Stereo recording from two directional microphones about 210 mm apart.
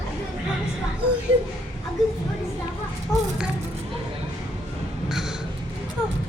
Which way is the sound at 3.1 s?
10° left (ahead or behind).